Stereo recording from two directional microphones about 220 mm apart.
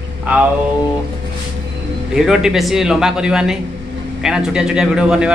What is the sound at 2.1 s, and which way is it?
A man's voice, 5° right (ahead or behind).